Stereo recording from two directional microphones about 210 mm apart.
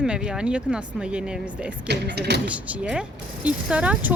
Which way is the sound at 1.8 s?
55° right (ahead or behind).